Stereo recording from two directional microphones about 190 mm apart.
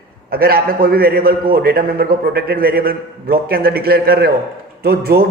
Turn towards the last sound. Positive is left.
turn(degrees=-55)  # may be behind; listen again after turning